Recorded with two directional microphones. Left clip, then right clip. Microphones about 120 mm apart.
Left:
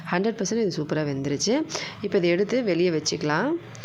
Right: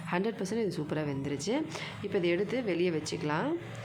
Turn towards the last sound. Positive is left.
turn(degrees=45)  # may be behind; listen again after turning